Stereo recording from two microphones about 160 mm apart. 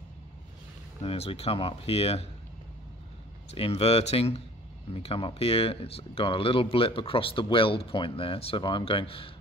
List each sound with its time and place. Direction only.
1.0 s speech: 40° left (ahead or behind)
3.5 s speech: 40° left (ahead or behind)